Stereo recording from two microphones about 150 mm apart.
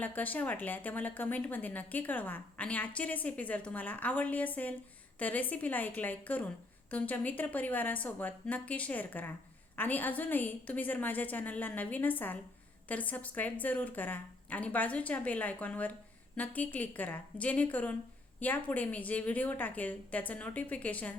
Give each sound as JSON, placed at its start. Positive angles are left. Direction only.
{"t": 0.0, "sound": "speech", "side_deg": 10}